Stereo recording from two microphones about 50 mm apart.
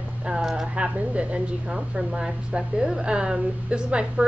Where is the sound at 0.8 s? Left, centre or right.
Right.